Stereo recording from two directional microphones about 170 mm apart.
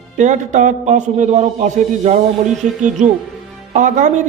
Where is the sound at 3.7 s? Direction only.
45° right (ahead or behind).